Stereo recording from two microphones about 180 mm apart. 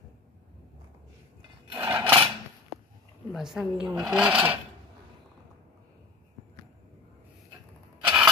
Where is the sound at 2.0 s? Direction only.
30° right (ahead or behind).